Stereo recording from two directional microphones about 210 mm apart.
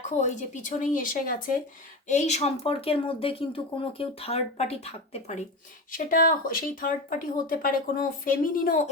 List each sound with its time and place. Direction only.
0.0 s speech: 35° left (ahead or behind)
6.1 s speech: 40° left (ahead or behind)